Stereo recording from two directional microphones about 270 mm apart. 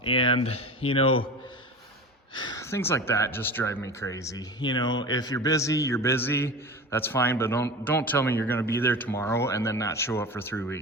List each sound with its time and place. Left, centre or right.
0.0 s speech: centre
2.3 s speech: centre